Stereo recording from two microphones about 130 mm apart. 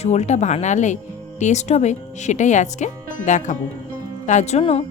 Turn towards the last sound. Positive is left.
turn(degrees=50)  # may be behind; listen again after turning